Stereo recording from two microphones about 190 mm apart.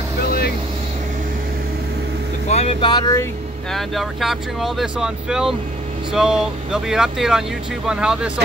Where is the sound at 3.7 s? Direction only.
Centre (ahead or behind).